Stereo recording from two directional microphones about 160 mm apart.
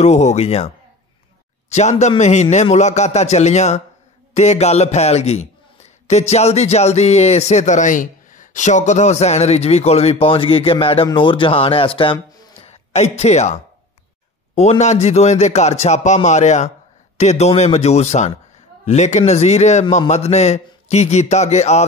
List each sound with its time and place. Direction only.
0.0 s speech: 45° left (ahead or behind); by 12.5 s 25° left (ahead or behind)
12.6 s speech: 40° left (ahead or behind)